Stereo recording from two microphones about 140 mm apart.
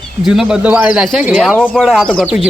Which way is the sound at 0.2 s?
5° right (ahead or behind).